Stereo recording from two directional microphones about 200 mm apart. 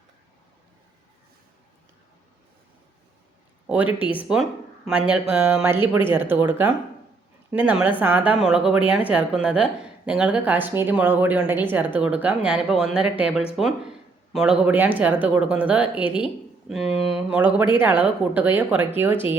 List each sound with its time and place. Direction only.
4.0 s a woman's voice: 5° right (ahead or behind)